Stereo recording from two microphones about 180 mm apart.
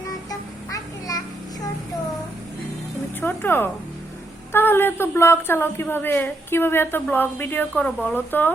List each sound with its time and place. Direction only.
0.3 s music: 20° left (ahead or behind)
3.2 s a woman's voice: 10° left (ahead or behind)